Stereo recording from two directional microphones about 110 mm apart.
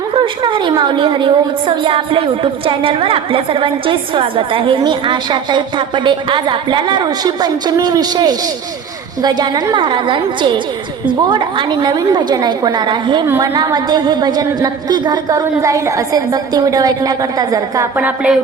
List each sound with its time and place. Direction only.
0.1 s a woman's voice: 45° right (ahead or behind)
17.9 s a woman's voice: 15° right (ahead or behind)